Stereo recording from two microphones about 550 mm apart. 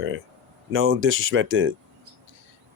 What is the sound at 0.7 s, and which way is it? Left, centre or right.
Speech, right.